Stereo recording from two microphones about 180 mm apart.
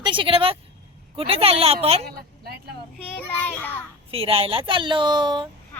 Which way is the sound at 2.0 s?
60° right (ahead or behind).